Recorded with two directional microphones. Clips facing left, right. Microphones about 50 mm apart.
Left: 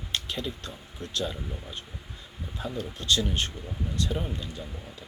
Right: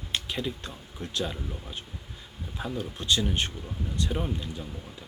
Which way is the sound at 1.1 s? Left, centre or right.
Centre.